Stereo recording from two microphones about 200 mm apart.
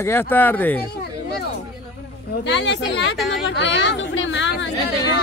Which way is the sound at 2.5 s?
60° left (ahead or behind).